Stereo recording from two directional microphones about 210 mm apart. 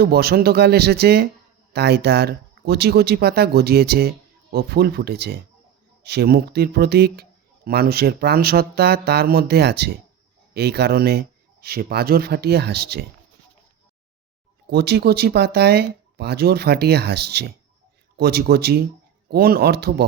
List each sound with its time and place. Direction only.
0.0 s speech: 50° right (ahead or behind)
14.7 s speech: 50° right (ahead or behind)